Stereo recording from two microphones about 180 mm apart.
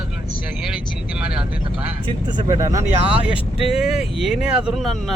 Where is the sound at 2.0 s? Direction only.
25° right (ahead or behind).